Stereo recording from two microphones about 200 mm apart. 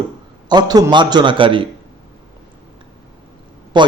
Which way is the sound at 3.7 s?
20° right (ahead or behind).